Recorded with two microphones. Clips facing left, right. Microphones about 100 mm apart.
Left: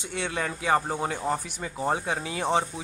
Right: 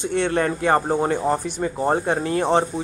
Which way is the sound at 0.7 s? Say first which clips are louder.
Right 7 dB; 20° right (ahead or behind).